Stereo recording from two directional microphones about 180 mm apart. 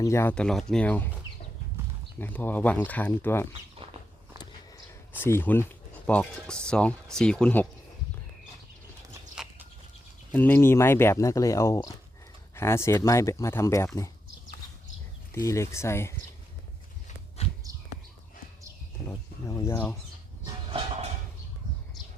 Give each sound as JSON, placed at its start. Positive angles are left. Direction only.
{"t": 0.0, "sound": "speech", "side_deg": 15}
{"t": 2.1, "sound": "speech", "side_deg": 10}
{"t": 3.8, "sound": "a sound", "side_deg": -35}
{"t": 5.1, "sound": "speech", "side_deg": 10}
{"t": 9.3, "sound": "livestock", "side_deg": -5}
{"t": 10.3, "sound": "speech", "side_deg": 10}
{"t": 15.4, "sound": "speech", "side_deg": 15}
{"t": 17.4, "sound": "horse", "side_deg": 35}
{"t": 19.0, "sound": "speech", "side_deg": 15}
{"t": 20.4, "sound": "train", "side_deg": -25}